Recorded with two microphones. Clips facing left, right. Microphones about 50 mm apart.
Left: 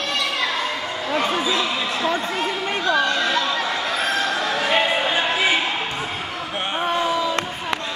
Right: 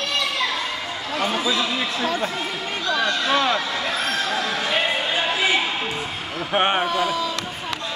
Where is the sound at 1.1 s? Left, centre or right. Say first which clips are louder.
Left 2 dB; left.